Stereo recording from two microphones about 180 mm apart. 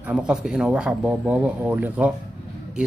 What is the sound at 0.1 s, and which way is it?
Speech, 5° right (ahead or behind).